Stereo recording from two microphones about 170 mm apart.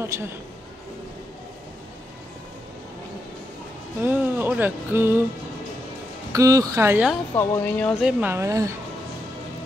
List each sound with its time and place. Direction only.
0.0 s music: 15° right (ahead or behind)
4.0 s music: 10° right (ahead or behind)
6.3 s speech: 20° right (ahead or behind)
7.3 s speech: 10° left (ahead or behind)
8.0 s music: 10° right (ahead or behind)